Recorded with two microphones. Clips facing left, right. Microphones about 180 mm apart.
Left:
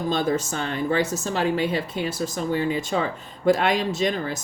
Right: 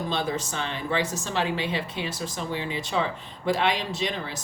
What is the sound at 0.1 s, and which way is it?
A woman's voice, 45° left (ahead or behind).